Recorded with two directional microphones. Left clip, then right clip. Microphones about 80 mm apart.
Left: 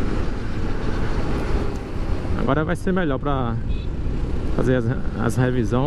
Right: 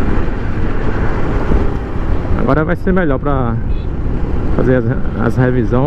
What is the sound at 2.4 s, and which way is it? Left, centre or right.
Speech, centre.